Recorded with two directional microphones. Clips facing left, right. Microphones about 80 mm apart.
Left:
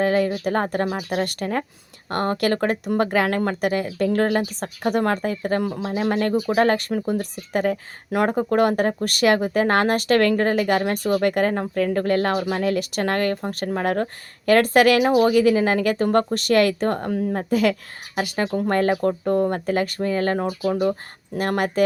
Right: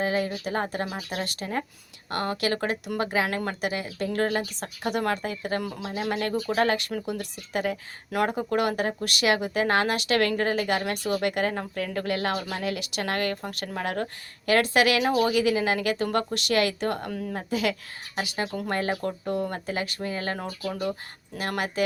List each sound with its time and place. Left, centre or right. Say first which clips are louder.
0.0 s speech: left 7 dB; left
2.0 s speech: left 6 dB; left
6.0 s speech: left 6 dB; left
6.3 s speech: left 6 dB; centre
6.6 s speech: left 5 dB; left
15.0 s speech: left 6 dB; left
15.3 s speech: left 6 dB; left
17.5 s speech: left 6 dB; left
18.4 s speech: left 9 dB; left